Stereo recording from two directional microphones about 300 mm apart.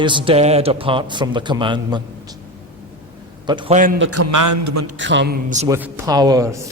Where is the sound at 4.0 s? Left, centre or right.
Right.